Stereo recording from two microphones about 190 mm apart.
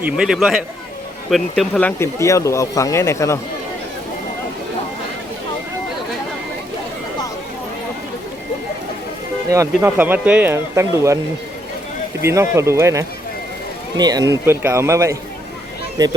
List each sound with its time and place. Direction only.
0.0 s a man's voice: 5° right (ahead or behind); by 3.4 s 15° left (ahead or behind)
9.5 s speech: 15° right (ahead or behind)
12.2 s speech: 15° right (ahead or behind)